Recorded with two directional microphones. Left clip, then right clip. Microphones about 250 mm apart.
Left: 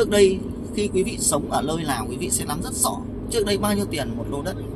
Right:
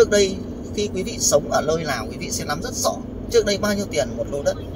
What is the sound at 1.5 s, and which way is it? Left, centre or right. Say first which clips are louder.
Speech: right 3 dB; centre.